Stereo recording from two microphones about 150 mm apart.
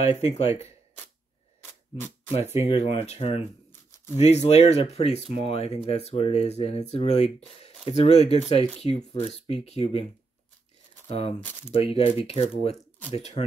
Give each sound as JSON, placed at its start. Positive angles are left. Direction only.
{"t": 0.0, "sound": "speech", "side_deg": 45}
{"t": 2.3, "sound": "speech", "side_deg": 45}
{"t": 11.1, "sound": "speech", "side_deg": 45}